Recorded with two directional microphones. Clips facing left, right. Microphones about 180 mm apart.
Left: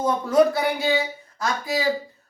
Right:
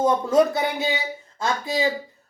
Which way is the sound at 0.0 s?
25° right (ahead or behind).